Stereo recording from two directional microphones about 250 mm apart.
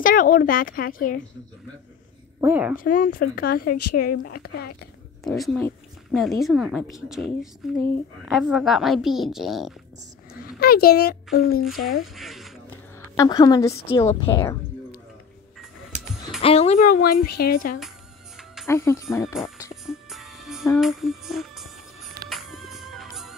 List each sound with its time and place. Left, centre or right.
0.0 s speech: left
2.4 s a woman's voice: centre
2.8 s speech: left
5.2 s a woman's voice: centre
10.6 s speech: left
12.2 s a sound: centre
13.1 s a woman's voice: centre
16.3 s speech: left
18.7 s a woman's voice: centre
19.2 s speech: centre
19.7 s music: centre
20.8 s a woman's voice: centre
22.3 s music: centre